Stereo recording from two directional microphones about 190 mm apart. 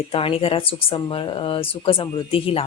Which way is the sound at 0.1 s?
30° left (ahead or behind).